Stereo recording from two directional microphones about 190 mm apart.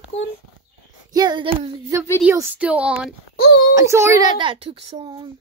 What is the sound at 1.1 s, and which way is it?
Speech, 20° right (ahead or behind).